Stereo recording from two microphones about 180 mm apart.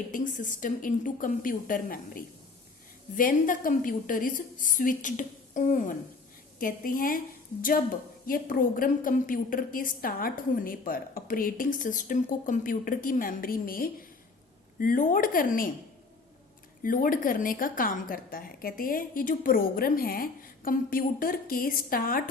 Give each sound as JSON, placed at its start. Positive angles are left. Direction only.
{"t": 0.1, "sound": "a woman's voice", "side_deg": 45}
{"t": 8.3, "sound": "a woman's voice", "side_deg": 50}
{"t": 16.8, "sound": "a woman's voice", "side_deg": 50}